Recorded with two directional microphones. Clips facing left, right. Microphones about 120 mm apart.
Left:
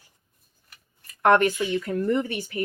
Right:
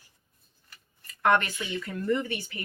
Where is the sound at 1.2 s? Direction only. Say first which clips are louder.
Left 6 dB; 50° left (ahead or behind).